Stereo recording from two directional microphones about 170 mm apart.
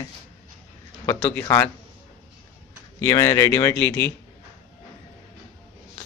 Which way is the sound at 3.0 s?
20° left (ahead or behind).